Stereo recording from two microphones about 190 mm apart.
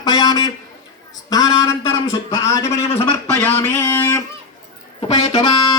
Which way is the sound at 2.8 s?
30° left (ahead or behind).